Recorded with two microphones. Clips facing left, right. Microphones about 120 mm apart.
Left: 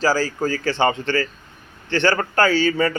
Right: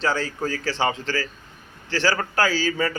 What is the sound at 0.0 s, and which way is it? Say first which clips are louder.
A man's voice: left 5 dB; 5° left (ahead or behind).